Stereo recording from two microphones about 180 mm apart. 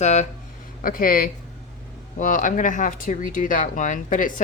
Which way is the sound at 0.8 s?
50° left (ahead or behind).